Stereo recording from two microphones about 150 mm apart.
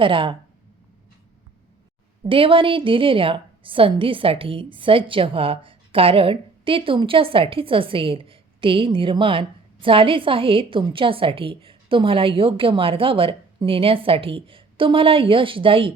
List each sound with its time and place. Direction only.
0.0 s a woman's voice: 35° right (ahead or behind)
2.2 s a woman's voice: 35° right (ahead or behind)